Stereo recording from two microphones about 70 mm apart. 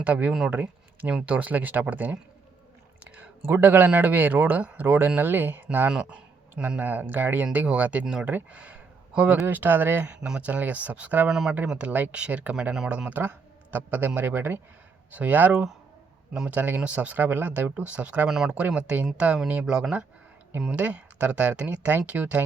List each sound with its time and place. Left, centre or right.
0.0 s speech: right
0.5 s a sound: right
1.1 s speech: right
5.9 s speech: centre; by 10.1 s right
10.2 s speech: centre
11.3 s speech: centre
11.6 s speech: centre
18.3 s speech: centre
18.5 s speech: centre